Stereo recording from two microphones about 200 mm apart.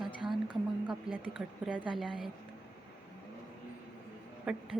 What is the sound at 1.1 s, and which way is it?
A woman's voice, 5° right (ahead or behind).